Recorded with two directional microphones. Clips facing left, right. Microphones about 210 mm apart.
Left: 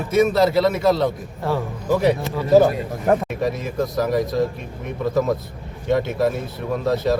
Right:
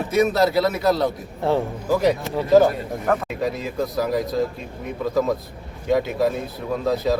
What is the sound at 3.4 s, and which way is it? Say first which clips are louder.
A man's voice: left 2 dB; centre (ahead or behind).